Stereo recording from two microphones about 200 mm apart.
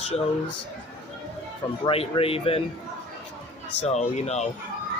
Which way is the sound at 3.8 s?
35° left (ahead or behind).